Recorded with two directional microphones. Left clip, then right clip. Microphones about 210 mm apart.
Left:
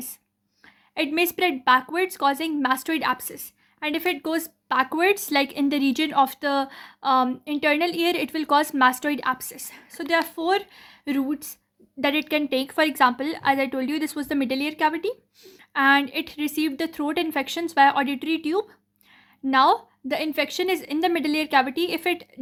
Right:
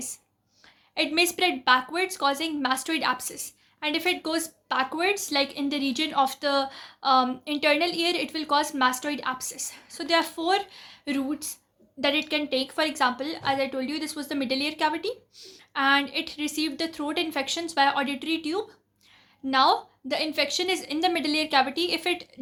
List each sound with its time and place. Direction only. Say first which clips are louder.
0.9 s a woman's voice: left 1 dB; 35° left (ahead or behind)